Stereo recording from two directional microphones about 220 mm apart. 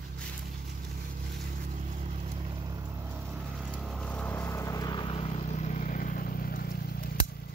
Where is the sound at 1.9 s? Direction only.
30° right (ahead or behind).